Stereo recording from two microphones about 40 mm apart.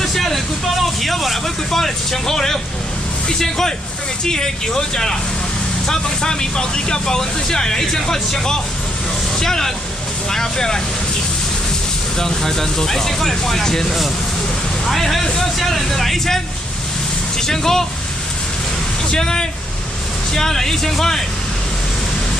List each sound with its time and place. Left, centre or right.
0.0 s a sound: centre
1.0 s vehicle: centre
3.3 s speech: centre
12.2 s speech: centre
17.5 s speech: centre
19.0 s speech: centre